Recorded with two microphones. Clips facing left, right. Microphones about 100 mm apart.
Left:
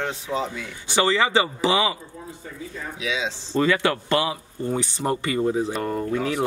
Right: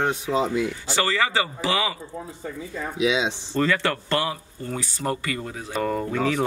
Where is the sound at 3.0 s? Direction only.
20° right (ahead or behind).